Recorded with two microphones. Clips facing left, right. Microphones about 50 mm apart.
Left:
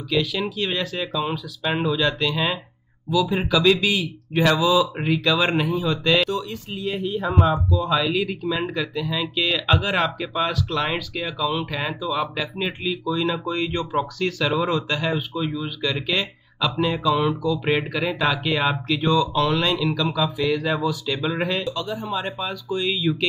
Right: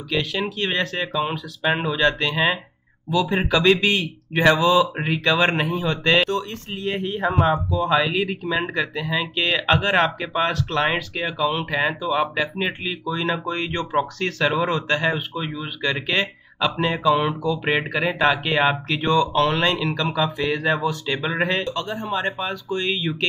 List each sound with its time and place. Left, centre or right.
0.1 s speech: right
4.3 s speech: right
4.6 s speech: right
20.8 s speech: right
21.2 s speech: right